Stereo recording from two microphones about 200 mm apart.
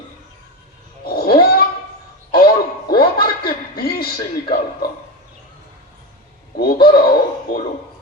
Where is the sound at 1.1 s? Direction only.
50° left (ahead or behind).